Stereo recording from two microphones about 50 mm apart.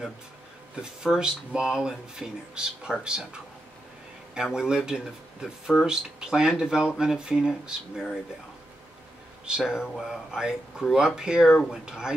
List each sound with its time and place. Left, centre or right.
1.0 s speech: centre
4.4 s speech: centre
9.5 s speech: centre